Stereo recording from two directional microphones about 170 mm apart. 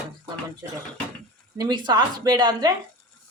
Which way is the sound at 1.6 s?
25° right (ahead or behind).